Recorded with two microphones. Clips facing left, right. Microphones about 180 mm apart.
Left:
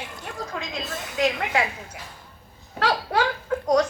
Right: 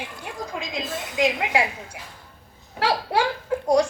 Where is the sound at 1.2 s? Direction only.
10° right (ahead or behind).